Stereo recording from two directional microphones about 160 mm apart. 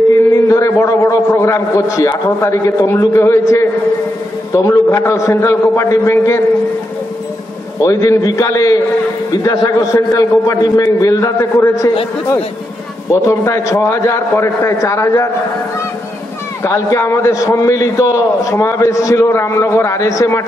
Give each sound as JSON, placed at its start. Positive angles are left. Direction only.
{"t": 0.3, "sound": "a man's voice", "side_deg": 20}
{"t": 4.6, "sound": "a man's voice", "side_deg": 20}
{"t": 7.8, "sound": "a man's voice", "side_deg": 20}
{"t": 13.1, "sound": "a man's voice", "side_deg": 20}
{"t": 16.6, "sound": "a man's voice", "side_deg": 20}